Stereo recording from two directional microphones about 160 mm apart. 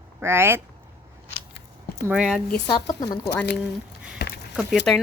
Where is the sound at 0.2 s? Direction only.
15° right (ahead or behind).